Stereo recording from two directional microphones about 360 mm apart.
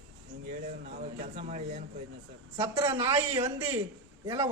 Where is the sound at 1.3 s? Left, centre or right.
Right.